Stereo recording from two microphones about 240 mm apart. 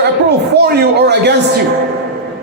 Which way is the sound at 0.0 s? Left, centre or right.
Right.